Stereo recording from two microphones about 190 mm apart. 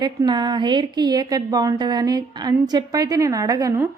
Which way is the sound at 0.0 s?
20° right (ahead or behind).